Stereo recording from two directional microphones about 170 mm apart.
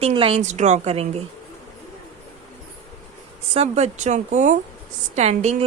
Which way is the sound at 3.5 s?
40° right (ahead or behind).